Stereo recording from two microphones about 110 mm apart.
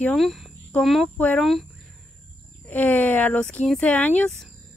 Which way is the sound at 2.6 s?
15° left (ahead or behind).